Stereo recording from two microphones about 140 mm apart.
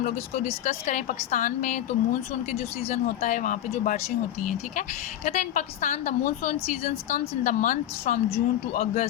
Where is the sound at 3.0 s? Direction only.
75° left (ahead or behind).